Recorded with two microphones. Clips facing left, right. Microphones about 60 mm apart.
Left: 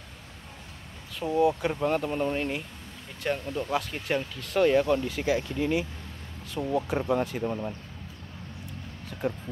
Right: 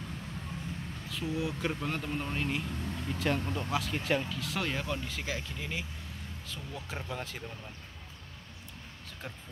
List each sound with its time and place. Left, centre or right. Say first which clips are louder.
1.2 s speech: left 11 dB; left
1.6 s speech: left 7 dB; centre
6.6 s speech: left 19 dB; left
7.2 s speech: left 11 dB; centre
7.4 s speech: left 14 dB; left